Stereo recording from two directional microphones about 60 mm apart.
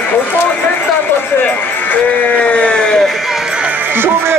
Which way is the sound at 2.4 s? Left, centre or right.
Centre.